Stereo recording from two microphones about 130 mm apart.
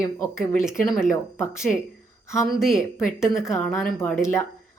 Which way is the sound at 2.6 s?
5° right (ahead or behind).